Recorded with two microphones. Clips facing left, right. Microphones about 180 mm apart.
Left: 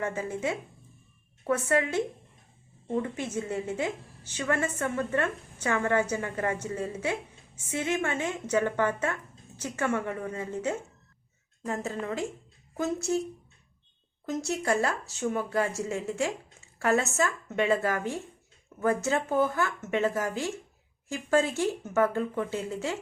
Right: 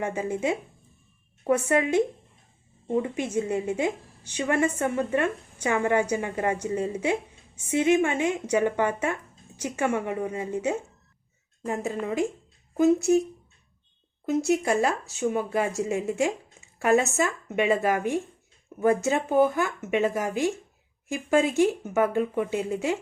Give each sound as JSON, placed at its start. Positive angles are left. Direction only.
{"t": 0.0, "sound": "a woman's voice", "side_deg": -15}
{"t": 14.3, "sound": "a woman's voice", "side_deg": -15}